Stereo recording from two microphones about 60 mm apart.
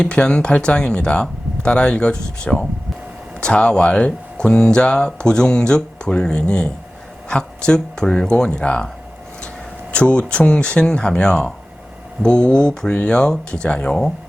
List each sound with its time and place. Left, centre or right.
0.0 s speech: centre
9.9 s speech: centre